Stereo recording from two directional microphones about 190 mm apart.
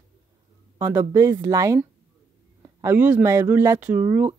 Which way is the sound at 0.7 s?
15° right (ahead or behind).